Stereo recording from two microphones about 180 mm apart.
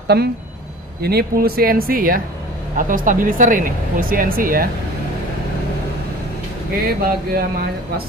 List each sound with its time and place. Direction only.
0.1 s speech: 60° right (ahead or behind)
7.0 s speech: 60° right (ahead or behind)